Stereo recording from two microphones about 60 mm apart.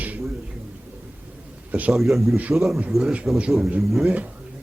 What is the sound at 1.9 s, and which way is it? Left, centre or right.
Speech, centre.